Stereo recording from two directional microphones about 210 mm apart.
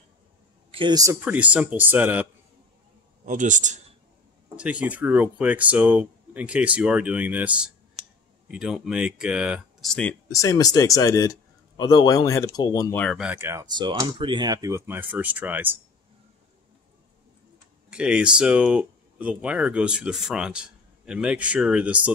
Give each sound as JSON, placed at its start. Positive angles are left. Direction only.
{"t": 0.7, "sound": "speech", "side_deg": -25}
{"t": 3.3, "sound": "a man's voice", "side_deg": -35}
{"t": 4.6, "sound": "speech", "side_deg": -5}
{"t": 13.0, "sound": "speech", "side_deg": 0}
{"t": 17.8, "sound": "speech", "side_deg": -5}